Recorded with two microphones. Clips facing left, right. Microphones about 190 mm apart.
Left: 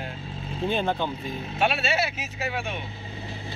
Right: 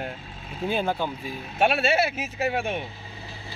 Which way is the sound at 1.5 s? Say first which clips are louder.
Right 4 dB; 50° right (ahead or behind).